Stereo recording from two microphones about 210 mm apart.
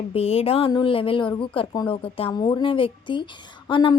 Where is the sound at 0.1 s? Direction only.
30° left (ahead or behind).